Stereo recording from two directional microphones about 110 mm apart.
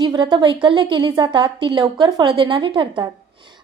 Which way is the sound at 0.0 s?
45° right (ahead or behind).